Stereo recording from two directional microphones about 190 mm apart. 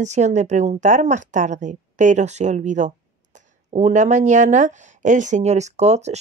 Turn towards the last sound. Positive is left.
turn(degrees=-35)  # may be behind; listen again after turning